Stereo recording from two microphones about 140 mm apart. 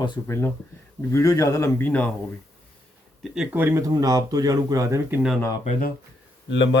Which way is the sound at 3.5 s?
20° right (ahead or behind).